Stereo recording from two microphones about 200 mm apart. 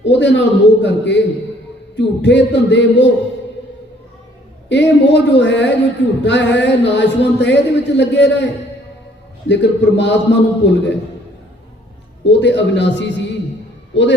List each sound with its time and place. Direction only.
0.0 s a man's voice: 60° left (ahead or behind)
4.7 s a man's voice: 60° left (ahead or behind)
9.5 s a man's voice: 60° left (ahead or behind)
12.2 s a man's voice: 60° left (ahead or behind)